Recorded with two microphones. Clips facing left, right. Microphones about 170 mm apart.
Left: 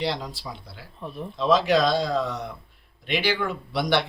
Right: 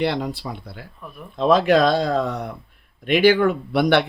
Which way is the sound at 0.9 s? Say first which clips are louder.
Left 4 dB; 25° left (ahead or behind).